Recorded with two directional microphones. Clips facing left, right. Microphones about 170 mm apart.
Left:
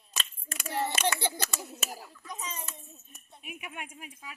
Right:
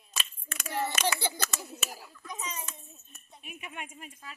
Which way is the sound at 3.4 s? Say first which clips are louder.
Left 1 dB; 10° left (ahead or behind).